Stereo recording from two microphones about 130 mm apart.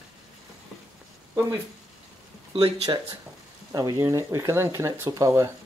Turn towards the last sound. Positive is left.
turn(degrees=-25)  # may be behind; listen again after turning